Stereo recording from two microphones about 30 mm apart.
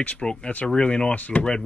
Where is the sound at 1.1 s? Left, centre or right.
Left.